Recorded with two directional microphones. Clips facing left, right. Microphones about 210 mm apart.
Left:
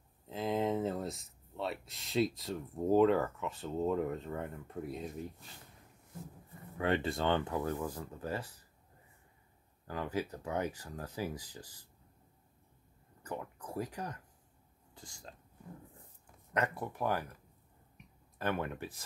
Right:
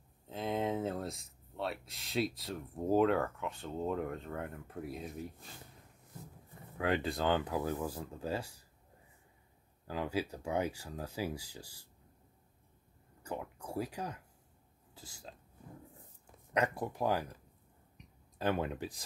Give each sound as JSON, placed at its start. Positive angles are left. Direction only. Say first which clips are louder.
{"t": 0.3, "sound": "speech", "louder": "left 2 dB", "side_deg": 0}
{"t": 6.8, "sound": "speech", "louder": "left 1 dB", "side_deg": 0}
{"t": 9.8, "sound": "speech", "louder": "right 1 dB", "side_deg": -10}
{"t": 13.2, "sound": "speech", "louder": "right 1 dB", "side_deg": -10}
{"t": 16.5, "sound": "speech", "louder": "right 2 dB", "side_deg": -15}
{"t": 18.6, "sound": "speech", "louder": "right 2 dB", "side_deg": -15}